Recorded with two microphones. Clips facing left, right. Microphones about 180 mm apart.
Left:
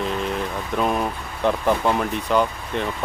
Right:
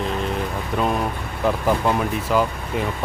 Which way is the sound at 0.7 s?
Centre (ahead or behind).